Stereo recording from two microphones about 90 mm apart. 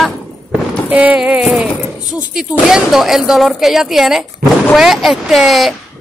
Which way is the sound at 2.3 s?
5° right (ahead or behind).